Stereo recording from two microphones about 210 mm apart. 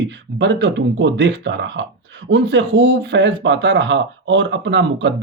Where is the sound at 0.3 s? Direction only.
60° right (ahead or behind).